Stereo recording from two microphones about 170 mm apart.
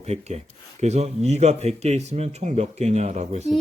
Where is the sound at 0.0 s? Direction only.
40° right (ahead or behind).